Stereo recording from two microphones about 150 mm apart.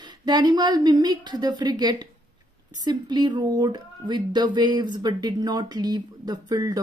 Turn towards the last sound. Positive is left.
turn(degrees=-25)  # may be behind; listen again after turning